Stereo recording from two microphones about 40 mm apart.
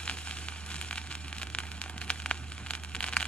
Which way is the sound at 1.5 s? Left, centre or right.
Left.